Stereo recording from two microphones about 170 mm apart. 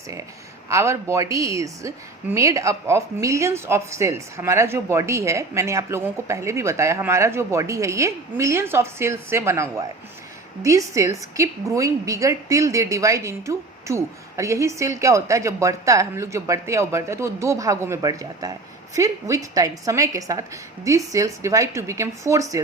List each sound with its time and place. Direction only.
0.7 s a woman's voice: 15° right (ahead or behind)